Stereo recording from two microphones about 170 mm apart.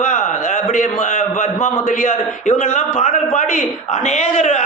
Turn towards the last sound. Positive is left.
turn(degrees=45)  # may be behind; listen again after turning